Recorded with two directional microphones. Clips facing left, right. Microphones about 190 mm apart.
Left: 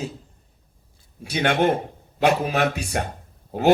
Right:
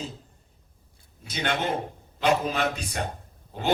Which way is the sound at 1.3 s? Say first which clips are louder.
Left 8 dB; 55° left (ahead or behind).